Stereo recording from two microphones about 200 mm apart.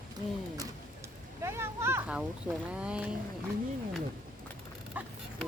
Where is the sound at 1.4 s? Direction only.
10° right (ahead or behind).